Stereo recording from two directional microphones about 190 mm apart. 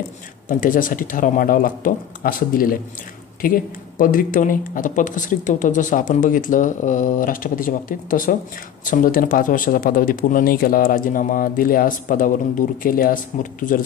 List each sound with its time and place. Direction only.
0.5 s speech: 45° left (ahead or behind)